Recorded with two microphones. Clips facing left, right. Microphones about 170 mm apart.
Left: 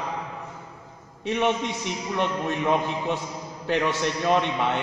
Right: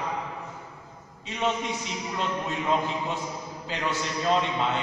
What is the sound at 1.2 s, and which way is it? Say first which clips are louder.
A man's voice: left 4 dB; 65° left (ahead or behind).